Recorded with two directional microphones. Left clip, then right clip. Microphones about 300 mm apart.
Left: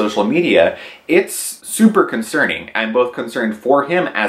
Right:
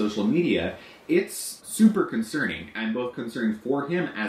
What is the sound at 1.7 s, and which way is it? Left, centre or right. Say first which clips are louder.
Speech: left 10 dB; left.